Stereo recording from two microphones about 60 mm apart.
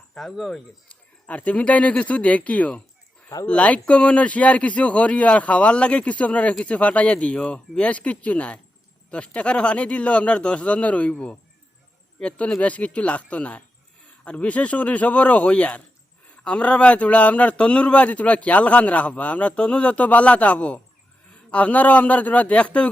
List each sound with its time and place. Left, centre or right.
0.2 s speech: centre
0.9 s speech: left